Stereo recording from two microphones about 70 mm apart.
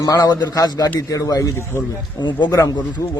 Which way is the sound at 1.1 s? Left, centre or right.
Left.